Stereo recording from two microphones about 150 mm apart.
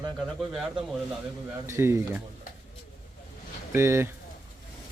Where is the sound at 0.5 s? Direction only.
Centre (ahead or behind).